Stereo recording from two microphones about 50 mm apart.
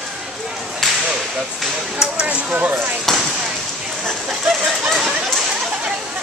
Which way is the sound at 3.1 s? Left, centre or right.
Centre.